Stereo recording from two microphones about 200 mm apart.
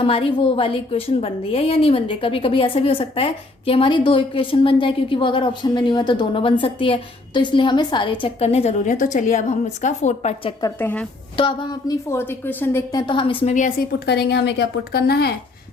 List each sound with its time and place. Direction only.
0.0 s a woman's voice: 25° left (ahead or behind)
10.6 s a woman's voice: 10° left (ahead or behind)
11.3 s a woman's voice: 20° left (ahead or behind); by 15.4 s 55° left (ahead or behind)